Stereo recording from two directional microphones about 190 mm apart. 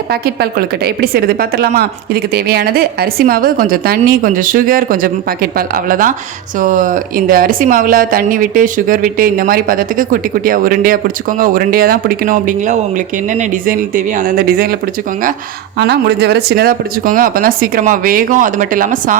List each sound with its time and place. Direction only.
0.9 s speech: 55° right (ahead or behind)
15.8 s speech: 60° right (ahead or behind); by 19.1 s 45° right (ahead or behind)